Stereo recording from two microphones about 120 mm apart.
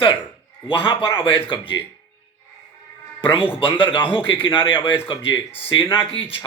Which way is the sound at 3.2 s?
45° left (ahead or behind).